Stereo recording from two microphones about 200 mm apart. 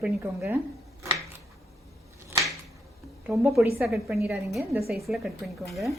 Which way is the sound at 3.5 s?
5° right (ahead or behind).